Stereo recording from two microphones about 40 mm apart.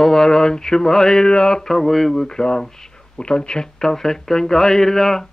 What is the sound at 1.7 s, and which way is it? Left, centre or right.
Speech, centre.